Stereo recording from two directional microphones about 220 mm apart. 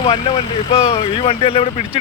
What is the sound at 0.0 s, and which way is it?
A man's voice, 25° left (ahead or behind).